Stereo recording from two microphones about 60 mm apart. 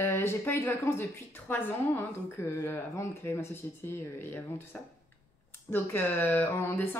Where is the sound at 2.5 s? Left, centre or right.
Left.